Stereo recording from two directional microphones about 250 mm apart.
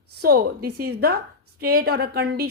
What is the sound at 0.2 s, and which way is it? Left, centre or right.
A woman's voice, right.